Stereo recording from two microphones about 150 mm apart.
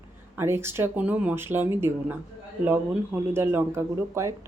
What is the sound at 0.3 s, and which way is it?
Speech, 15° right (ahead or behind).